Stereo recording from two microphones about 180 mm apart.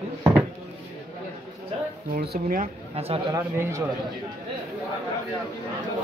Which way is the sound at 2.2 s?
55° right (ahead or behind).